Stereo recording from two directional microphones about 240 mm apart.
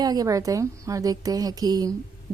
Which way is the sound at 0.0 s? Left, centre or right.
Centre.